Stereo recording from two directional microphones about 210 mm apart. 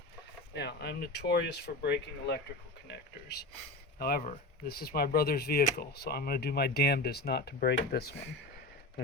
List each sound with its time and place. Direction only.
0.5 s speech: 50° left (ahead or behind)
2.8 s a sound: 50° left (ahead or behind)
3.9 s speech: 45° left (ahead or behind)